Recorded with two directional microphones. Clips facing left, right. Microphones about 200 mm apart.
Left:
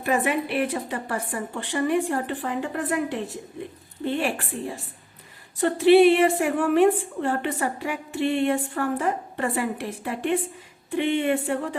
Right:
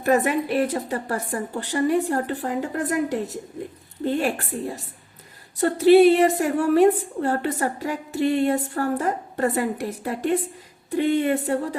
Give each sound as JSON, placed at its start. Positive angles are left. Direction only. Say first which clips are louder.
{"t": 0.0, "sound": "a woman's voice", "louder": "right 3 dB", "side_deg": -40}